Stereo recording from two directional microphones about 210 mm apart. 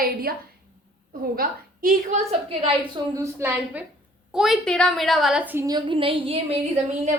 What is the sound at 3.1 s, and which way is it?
Speech, 10° right (ahead or behind).